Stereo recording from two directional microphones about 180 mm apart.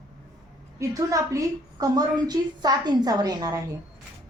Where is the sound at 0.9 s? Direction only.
20° right (ahead or behind).